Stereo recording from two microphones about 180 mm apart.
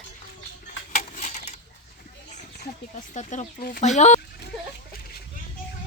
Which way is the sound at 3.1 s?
50° left (ahead or behind).